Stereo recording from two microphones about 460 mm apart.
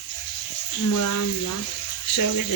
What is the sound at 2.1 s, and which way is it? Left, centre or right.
Speech, left.